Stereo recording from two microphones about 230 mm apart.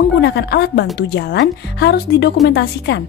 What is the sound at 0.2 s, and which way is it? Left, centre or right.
A woman's voice, left.